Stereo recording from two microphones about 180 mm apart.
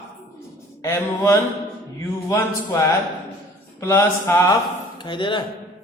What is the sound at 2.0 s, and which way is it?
Speech, 20° left (ahead or behind).